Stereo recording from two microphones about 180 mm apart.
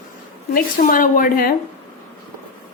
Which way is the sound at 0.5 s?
50° left (ahead or behind).